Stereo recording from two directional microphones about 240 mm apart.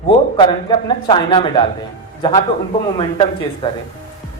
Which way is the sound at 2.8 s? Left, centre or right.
Left.